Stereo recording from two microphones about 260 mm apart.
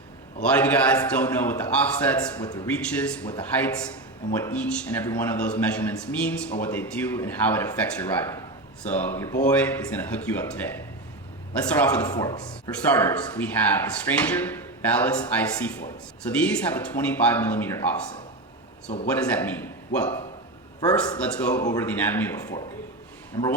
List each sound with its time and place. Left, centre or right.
0.5 s a man's voice: centre
4.4 s a man's voice: centre
11.7 s speech: centre
19.1 s a man's voice: centre